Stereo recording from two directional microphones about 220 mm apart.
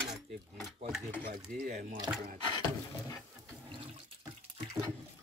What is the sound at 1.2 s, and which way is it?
Speech, 35° right (ahead or behind).